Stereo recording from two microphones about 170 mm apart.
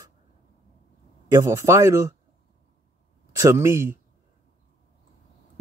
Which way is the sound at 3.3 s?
15° right (ahead or behind).